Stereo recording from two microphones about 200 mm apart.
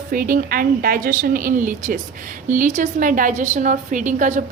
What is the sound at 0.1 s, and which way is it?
A woman's voice, 45° right (ahead or behind).